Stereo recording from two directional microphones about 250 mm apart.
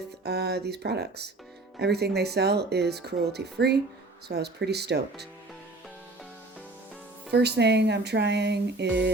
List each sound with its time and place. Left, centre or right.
0.3 s speech: right
7.3 s speech: right